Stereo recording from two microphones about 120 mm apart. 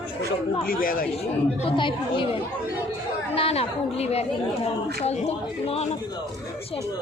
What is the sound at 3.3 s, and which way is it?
A woman's voice, 55° left (ahead or behind).